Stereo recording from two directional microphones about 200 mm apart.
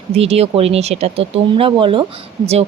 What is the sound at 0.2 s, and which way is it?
Speech, 30° right (ahead or behind).